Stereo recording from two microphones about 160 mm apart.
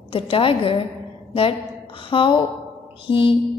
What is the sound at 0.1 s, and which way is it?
Speech, 35° left (ahead or behind).